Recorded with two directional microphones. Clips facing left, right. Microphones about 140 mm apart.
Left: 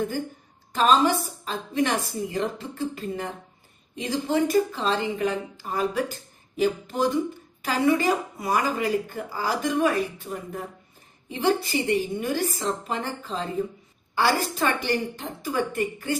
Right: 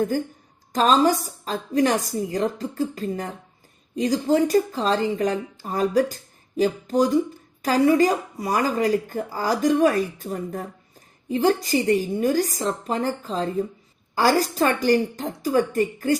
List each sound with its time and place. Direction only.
0.7 s speech: 40° right (ahead or behind)